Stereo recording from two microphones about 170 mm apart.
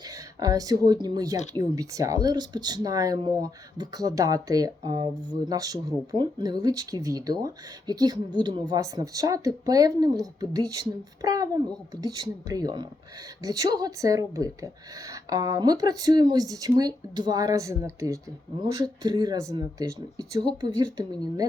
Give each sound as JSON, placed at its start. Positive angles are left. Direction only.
{"t": 0.0, "sound": "speech", "side_deg": -20}